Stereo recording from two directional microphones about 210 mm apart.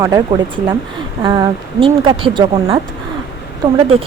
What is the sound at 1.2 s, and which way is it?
Speech, 20° right (ahead or behind).